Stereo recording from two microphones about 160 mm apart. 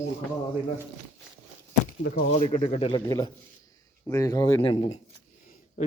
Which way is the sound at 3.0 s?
20° left (ahead or behind).